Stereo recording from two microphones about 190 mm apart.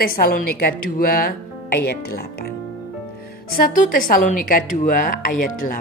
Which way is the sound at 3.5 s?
45° left (ahead or behind).